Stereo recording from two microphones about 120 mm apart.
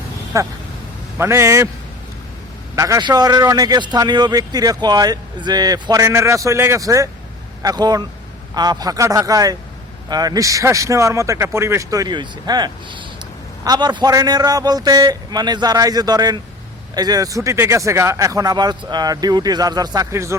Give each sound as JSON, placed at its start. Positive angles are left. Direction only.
{"t": 0.3, "sound": "speech", "side_deg": -25}
{"t": 2.7, "sound": "speech", "side_deg": -25}
{"t": 20.1, "sound": "speech", "side_deg": -25}